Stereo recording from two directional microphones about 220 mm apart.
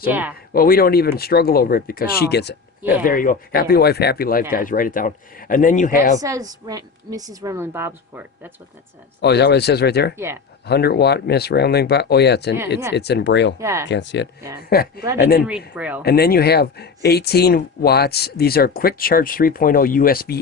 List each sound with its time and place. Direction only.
0.1 s a woman's voice: 10° right (ahead or behind)
0.5 s speech: 40° left (ahead or behind)
3.0 s speech: 40° left (ahead or behind)
6.1 s a woman's voice: 15° right (ahead or behind)
9.2 s speech: 50° left (ahead or behind)
10.2 s a woman's voice: 10° right (ahead or behind)
10.7 s speech: 45° left (ahead or behind)
13.6 s a woman's voice: 15° right (ahead or behind)
13.8 s speech: 55° left (ahead or behind)
15.4 s a woman's voice: 5° right (ahead or behind)
16.0 s speech: 45° left (ahead or behind)